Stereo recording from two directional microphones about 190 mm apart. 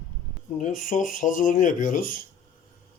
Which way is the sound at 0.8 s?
40° left (ahead or behind).